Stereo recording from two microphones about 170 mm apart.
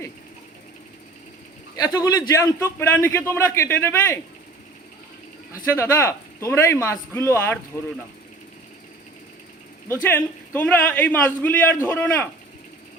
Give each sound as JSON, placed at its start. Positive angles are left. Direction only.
{"t": 1.8, "sound": "a man's voice", "side_deg": 20}
{"t": 5.7, "sound": "a man's voice", "side_deg": 15}
{"t": 9.9, "sound": "a man's voice", "side_deg": 10}